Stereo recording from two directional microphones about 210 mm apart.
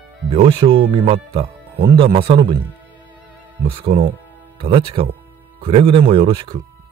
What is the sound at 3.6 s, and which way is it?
Speech, 25° right (ahead or behind).